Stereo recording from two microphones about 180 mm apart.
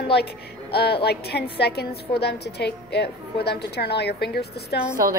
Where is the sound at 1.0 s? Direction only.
65° left (ahead or behind).